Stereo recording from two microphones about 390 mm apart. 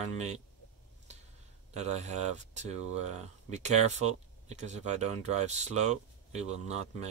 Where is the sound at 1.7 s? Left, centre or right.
Centre.